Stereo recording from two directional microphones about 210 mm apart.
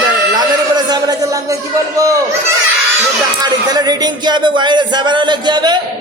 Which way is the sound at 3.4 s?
20° right (ahead or behind).